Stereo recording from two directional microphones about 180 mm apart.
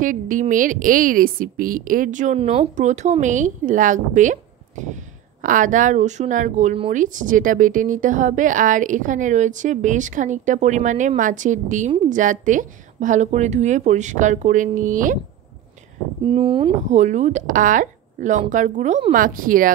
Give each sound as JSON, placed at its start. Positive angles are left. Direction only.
{"t": 0.0, "sound": "a woman's voice", "side_deg": -45}
{"t": 16.3, "sound": "speech", "side_deg": -30}
{"t": 17.0, "sound": "a woman's voice", "side_deg": -40}